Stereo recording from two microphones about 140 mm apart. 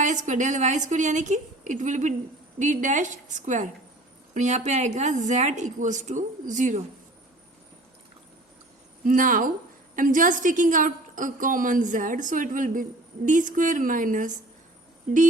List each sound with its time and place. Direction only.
0.3 s a woman's voice: 60° right (ahead or behind)
9.0 s a woman's voice: 75° right (ahead or behind)